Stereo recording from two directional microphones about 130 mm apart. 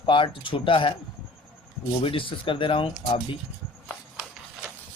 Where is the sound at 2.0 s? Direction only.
45° left (ahead or behind).